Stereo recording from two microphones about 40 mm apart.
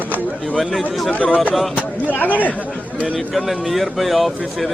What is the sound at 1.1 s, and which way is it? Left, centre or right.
Speech, left.